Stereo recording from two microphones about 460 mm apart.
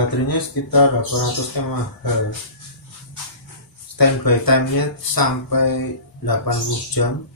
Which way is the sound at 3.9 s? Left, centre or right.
Left.